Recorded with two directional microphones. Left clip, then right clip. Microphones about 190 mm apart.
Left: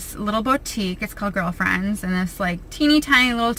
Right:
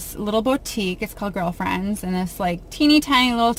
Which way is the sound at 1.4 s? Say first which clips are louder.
Left 2 dB; 25° left (ahead or behind).